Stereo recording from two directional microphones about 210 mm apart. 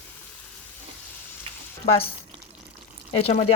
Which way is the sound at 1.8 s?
30° left (ahead or behind).